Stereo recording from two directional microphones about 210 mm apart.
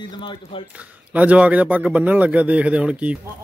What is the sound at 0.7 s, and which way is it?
A man's voice, 5° right (ahead or behind).